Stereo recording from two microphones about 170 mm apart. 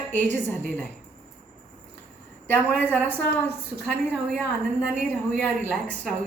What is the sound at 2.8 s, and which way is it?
Speech, 10° left (ahead or behind).